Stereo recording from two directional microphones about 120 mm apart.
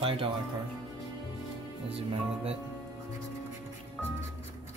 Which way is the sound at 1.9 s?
55° right (ahead or behind).